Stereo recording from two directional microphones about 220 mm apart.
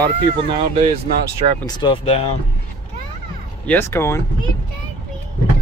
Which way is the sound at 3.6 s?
10° left (ahead or behind).